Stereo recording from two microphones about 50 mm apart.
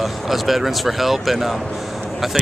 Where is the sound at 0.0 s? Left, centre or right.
Centre.